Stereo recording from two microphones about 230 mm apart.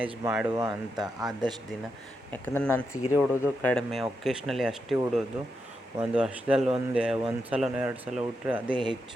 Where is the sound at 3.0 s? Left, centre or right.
Centre.